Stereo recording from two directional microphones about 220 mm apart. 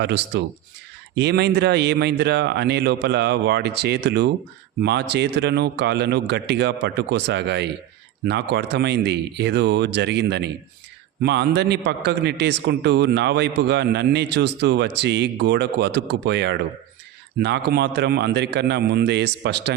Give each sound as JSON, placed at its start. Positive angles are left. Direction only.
{"t": 0.0, "sound": "a man's voice", "side_deg": -50}